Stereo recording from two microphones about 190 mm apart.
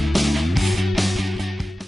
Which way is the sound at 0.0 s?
Centre (ahead or behind).